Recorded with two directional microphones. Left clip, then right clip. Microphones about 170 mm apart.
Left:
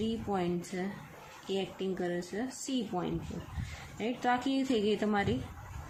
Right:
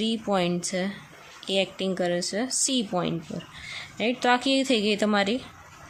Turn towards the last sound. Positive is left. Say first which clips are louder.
# right 7 dB
turn(degrees=-35)  # may be behind; listen again after turning